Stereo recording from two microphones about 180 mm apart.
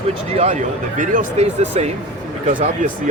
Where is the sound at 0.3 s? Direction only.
40° right (ahead or behind).